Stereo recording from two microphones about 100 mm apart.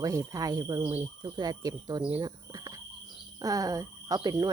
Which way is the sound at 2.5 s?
40° right (ahead or behind).